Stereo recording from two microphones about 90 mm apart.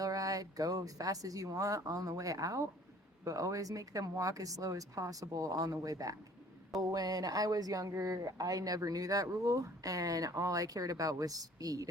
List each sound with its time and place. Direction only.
0.0 s speech: 40° right (ahead or behind)